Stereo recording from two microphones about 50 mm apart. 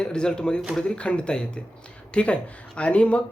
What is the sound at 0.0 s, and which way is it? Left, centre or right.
Speech, centre.